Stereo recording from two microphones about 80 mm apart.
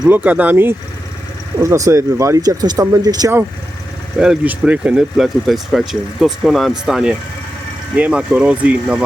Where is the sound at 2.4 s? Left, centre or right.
Right.